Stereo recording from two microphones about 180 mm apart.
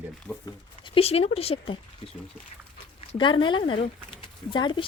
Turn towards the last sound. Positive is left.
turn(degrees=25)  # may be behind; listen again after turning